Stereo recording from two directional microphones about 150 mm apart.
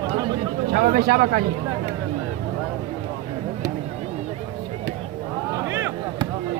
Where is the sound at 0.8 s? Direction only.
80° right.